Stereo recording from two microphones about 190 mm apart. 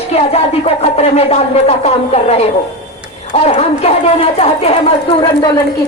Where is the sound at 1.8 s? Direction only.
35° left (ahead or behind).